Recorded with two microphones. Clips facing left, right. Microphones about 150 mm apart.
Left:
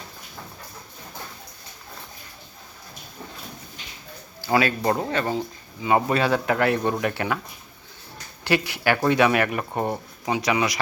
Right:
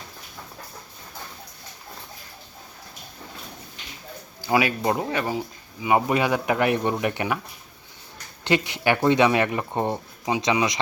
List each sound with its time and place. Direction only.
4.5 s speech: 15° right (ahead or behind)
8.4 s speech: 20° right (ahead or behind)